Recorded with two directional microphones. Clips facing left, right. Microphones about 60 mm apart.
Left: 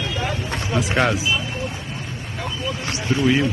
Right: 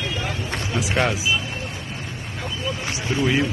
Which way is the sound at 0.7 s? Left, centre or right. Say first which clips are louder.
Left 3 dB; centre.